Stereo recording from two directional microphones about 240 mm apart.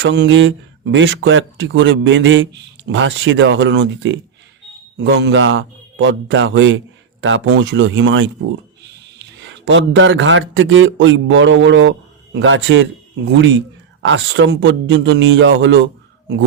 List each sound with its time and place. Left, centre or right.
0.0 s speech: right